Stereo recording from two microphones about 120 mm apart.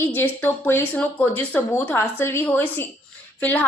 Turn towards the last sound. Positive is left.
turn(degrees=10)  # may be behind; listen again after turning